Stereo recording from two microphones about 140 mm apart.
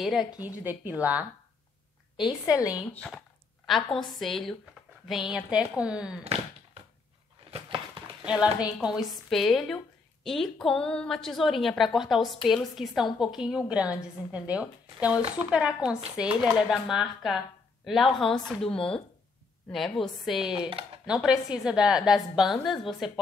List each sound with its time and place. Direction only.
0.0 s a woman's voice: 5° right (ahead or behind)
2.2 s a woman's voice: 25° left (ahead or behind)
2.9 s a woman's voice: 10° left (ahead or behind); by 6.1 s 5° right (ahead or behind)
8.3 s a woman's voice: 5° right (ahead or behind)